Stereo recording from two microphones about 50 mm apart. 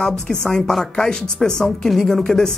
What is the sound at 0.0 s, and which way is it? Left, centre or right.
A woman's voice, centre.